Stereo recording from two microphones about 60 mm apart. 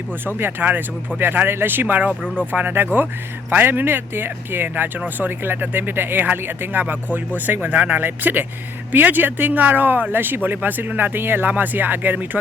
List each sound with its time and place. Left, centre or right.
0.3 s speech: right